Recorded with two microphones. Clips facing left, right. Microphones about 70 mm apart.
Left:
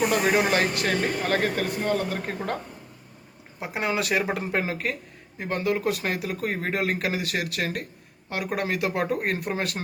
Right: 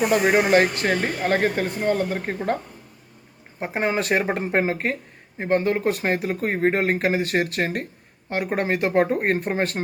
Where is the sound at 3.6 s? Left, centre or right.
Right.